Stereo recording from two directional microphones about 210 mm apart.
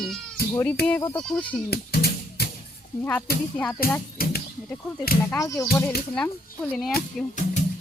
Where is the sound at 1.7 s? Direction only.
50° left (ahead or behind).